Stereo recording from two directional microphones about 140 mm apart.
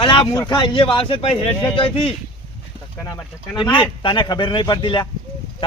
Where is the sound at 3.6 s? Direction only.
35° left (ahead or behind).